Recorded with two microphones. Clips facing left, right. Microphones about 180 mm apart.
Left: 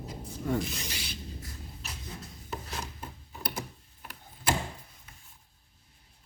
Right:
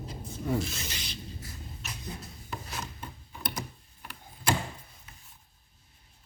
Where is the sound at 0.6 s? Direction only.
15° left (ahead or behind).